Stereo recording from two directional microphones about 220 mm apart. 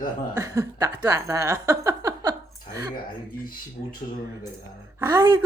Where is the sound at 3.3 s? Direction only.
40° left (ahead or behind).